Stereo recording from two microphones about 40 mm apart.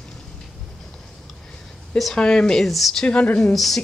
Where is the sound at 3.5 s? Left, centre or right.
Centre.